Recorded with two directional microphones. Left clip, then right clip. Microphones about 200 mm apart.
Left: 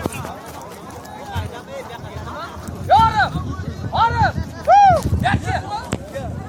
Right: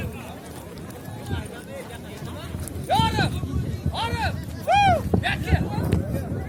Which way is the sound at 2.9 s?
30° right (ahead or behind).